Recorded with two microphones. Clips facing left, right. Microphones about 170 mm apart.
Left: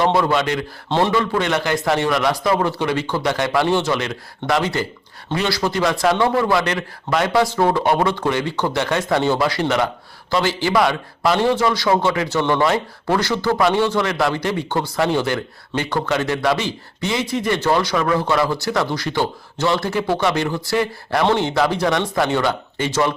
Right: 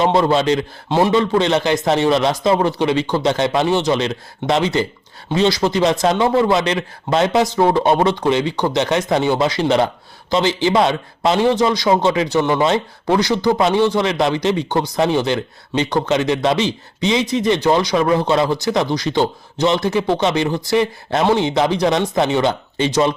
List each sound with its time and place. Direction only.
0.0 s speech: 25° right (ahead or behind)
0.9 s a man's voice: 10° right (ahead or behind)
1.1 s a man's voice: 25° right (ahead or behind)